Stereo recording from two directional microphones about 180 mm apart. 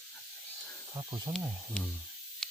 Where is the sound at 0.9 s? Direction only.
20° right (ahead or behind).